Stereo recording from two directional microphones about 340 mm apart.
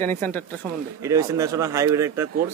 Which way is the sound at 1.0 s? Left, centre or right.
Centre.